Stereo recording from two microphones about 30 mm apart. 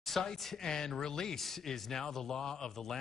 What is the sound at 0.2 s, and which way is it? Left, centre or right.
A man's voice, centre.